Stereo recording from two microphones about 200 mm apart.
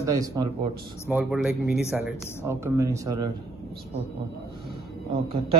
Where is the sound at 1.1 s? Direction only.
5° right (ahead or behind).